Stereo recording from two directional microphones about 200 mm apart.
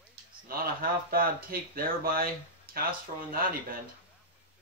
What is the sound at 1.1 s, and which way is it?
Speech, 45° right (ahead or behind).